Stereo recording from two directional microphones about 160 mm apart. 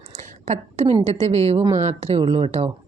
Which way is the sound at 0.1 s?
45° right (ahead or behind).